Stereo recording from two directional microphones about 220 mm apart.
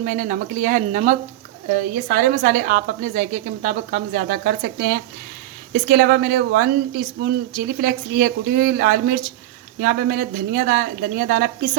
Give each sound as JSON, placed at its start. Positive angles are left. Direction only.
{"t": 0.0, "sound": "speech", "side_deg": -35}